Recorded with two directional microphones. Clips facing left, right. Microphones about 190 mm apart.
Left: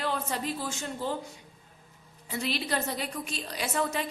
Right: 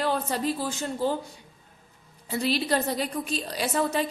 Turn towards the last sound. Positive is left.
turn(degrees=-35)  # may be behind; listen again after turning